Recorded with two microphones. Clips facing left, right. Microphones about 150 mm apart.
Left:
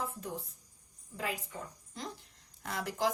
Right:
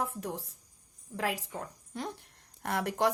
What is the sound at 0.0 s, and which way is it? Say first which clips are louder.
Speech: right 4 dB; 80° right.